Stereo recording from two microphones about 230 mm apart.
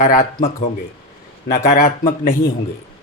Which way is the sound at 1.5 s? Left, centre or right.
Left.